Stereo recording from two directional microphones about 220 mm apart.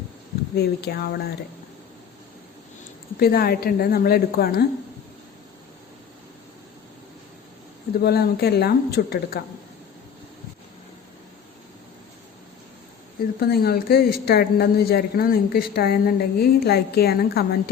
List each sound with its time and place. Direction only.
0.5 s speech: 45° left (ahead or behind)
3.2 s speech: 45° left (ahead or behind)
7.9 s speech: 45° left (ahead or behind)
13.4 s speech: 45° left (ahead or behind)